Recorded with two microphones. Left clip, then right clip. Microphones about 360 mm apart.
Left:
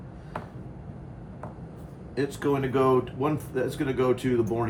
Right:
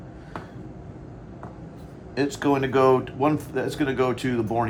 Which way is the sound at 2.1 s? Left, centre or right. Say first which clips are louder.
Right 4 dB; right.